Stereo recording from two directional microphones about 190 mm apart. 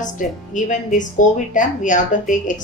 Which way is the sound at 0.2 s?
40° left (ahead or behind).